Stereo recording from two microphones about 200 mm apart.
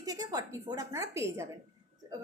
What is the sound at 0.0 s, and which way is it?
A woman's voice, 20° right (ahead or behind).